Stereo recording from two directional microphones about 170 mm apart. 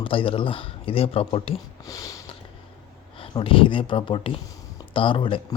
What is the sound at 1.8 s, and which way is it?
Sniff, 20° left (ahead or behind).